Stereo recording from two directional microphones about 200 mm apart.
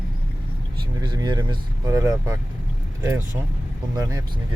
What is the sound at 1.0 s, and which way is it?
Speech, 20° right (ahead or behind).